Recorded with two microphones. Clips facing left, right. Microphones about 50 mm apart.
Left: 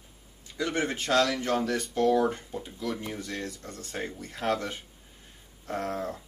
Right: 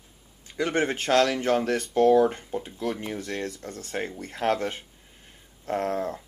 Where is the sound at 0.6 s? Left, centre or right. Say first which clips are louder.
Right 4 dB; right.